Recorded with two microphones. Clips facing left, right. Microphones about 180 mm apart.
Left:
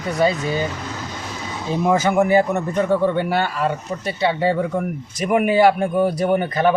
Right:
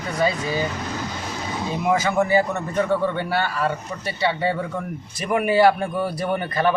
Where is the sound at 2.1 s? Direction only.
15° left (ahead or behind).